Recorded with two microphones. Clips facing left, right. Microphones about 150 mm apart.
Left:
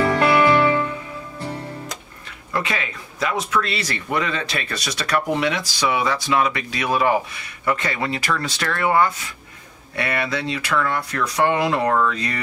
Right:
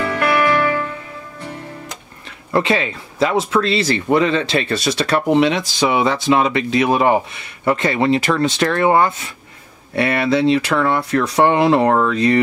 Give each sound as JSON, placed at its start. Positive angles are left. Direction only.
{"t": 0.0, "sound": "music", "side_deg": 30}
{"t": 2.5, "sound": "speech", "side_deg": -30}